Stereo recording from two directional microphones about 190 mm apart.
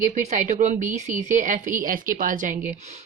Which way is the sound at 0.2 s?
40° right (ahead or behind).